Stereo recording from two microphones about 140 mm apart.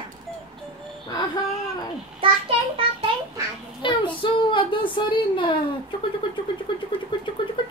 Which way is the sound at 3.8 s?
35° left (ahead or behind).